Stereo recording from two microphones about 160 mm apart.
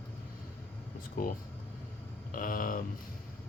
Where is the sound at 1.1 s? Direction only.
60° left (ahead or behind).